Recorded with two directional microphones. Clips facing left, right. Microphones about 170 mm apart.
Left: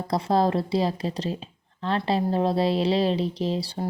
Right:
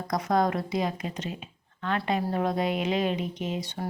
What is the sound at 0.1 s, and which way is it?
Speech, 30° left (ahead or behind).